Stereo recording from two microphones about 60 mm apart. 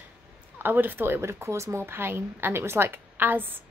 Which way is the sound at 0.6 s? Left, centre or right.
Right.